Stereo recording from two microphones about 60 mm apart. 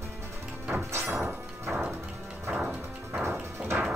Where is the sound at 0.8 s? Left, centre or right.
Right.